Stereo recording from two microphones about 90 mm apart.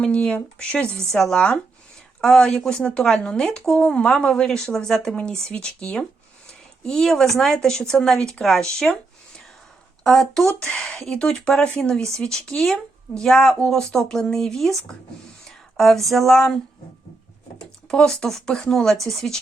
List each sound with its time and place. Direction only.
0.0 s speech: 10° left (ahead or behind)
10.0 s speech: 5° left (ahead or behind)
17.8 s speech: 10° left (ahead or behind)